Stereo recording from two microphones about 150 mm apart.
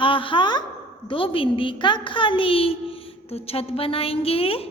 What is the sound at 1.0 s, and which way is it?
A woman's voice, 35° left (ahead or behind).